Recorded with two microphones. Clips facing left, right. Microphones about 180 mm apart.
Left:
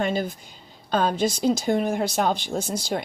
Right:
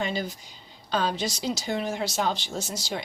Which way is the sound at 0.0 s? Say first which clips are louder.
Left 5 dB; 50° left (ahead or behind).